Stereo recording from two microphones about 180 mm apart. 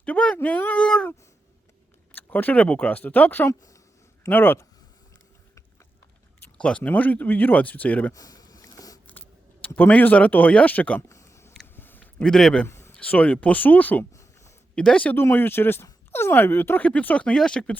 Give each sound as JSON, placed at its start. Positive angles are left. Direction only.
{"t": 0.0, "sound": "speech", "side_deg": 5}
{"t": 2.1, "sound": "speech", "side_deg": 10}
{"t": 6.4, "sound": "speech", "side_deg": 5}
{"t": 8.2, "sound": "a sound", "side_deg": 20}
{"t": 9.0, "sound": "a sound", "side_deg": 10}
{"t": 12.6, "sound": "speech", "side_deg": 15}
{"t": 14.8, "sound": "speech", "side_deg": 5}